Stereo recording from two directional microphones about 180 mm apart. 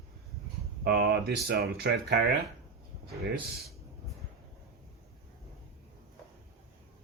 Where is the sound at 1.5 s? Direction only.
65° right (ahead or behind).